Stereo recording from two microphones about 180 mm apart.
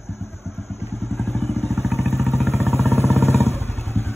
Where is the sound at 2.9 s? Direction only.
15° left (ahead or behind).